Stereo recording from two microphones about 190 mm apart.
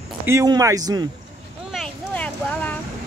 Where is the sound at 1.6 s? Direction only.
Centre (ahead or behind).